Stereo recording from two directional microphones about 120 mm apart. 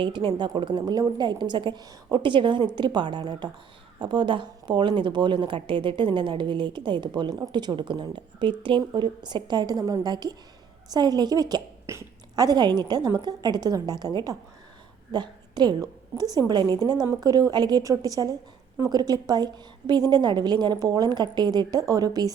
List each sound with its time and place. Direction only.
0.0 s a woman's voice: 45° right (ahead or behind)